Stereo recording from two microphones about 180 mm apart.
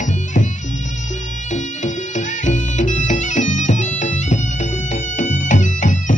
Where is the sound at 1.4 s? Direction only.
40° left (ahead or behind).